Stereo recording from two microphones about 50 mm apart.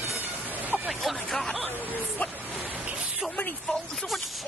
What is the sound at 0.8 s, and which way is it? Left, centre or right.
Vehicle, centre.